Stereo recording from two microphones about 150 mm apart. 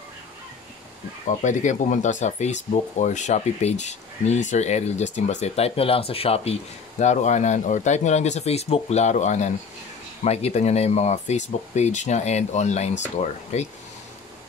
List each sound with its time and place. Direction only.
1.2 s speech: 55° left (ahead or behind)